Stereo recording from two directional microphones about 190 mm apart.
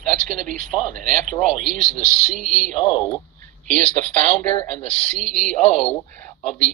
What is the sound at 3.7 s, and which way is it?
Speech, 5° left (ahead or behind).